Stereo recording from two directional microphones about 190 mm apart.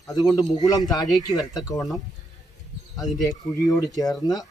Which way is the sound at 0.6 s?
20° left (ahead or behind).